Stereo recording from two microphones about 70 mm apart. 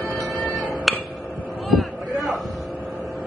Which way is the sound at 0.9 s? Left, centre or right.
Centre.